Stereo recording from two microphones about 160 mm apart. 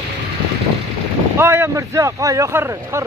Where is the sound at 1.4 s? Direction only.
15° right (ahead or behind).